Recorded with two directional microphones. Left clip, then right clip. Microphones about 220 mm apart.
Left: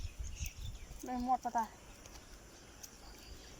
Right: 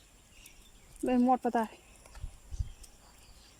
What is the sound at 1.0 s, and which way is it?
Speech, 55° right (ahead or behind).